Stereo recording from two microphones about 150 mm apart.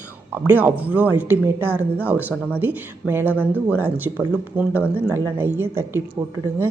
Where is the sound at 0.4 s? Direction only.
10° right (ahead or behind).